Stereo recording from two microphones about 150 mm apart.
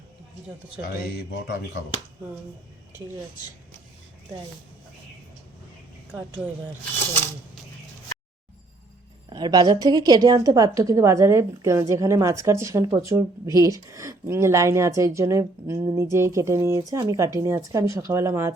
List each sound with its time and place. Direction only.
1.1 s speech: 90° left
9.3 s a woman's voice: 25° right (ahead or behind)